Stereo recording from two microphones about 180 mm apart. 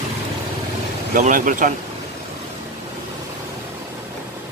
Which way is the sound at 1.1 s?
50° right (ahead or behind).